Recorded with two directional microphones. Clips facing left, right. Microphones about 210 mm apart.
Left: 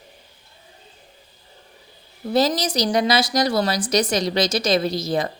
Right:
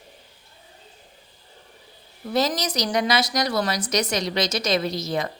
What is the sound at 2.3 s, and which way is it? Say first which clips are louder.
A woman's voice: left 4 dB; 30° left (ahead or behind).